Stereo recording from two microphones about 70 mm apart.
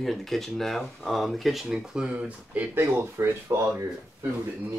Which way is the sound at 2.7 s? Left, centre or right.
Right.